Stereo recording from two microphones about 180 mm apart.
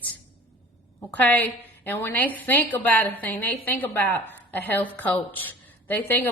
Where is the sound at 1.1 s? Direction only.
10° left (ahead or behind).